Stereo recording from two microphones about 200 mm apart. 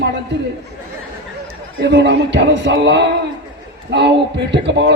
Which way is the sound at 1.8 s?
60° right (ahead or behind).